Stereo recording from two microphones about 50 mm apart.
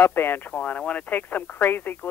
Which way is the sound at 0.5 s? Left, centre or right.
Left.